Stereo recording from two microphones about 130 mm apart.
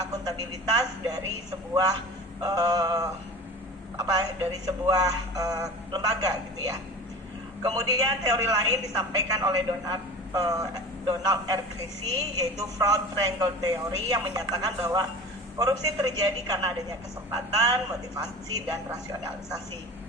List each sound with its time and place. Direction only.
0.0 s a man's voice: 30° right (ahead or behind)